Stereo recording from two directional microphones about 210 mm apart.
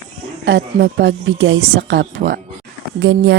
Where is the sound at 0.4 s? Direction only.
60° right (ahead or behind).